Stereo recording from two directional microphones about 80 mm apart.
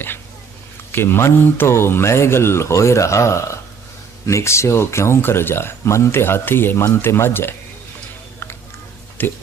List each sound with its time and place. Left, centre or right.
0.9 s speech: left
9.2 s speech: left